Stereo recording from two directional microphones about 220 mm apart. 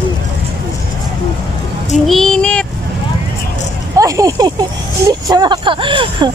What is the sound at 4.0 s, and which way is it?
Speech, 15° right (ahead or behind).